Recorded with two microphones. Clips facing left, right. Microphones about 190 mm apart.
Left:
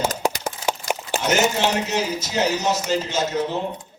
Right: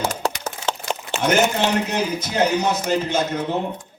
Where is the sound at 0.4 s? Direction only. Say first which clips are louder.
Left 1 dB; 10° left (ahead or behind).